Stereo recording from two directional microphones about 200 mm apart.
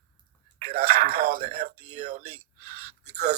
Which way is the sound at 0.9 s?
30° right (ahead or behind).